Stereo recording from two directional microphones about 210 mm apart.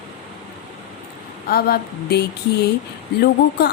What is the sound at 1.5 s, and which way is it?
A woman's voice, 45° left (ahead or behind).